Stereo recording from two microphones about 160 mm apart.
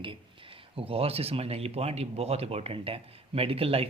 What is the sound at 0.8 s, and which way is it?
Speech, 35° right (ahead or behind).